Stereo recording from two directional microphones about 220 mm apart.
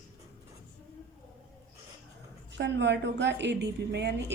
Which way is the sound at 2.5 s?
50° right (ahead or behind).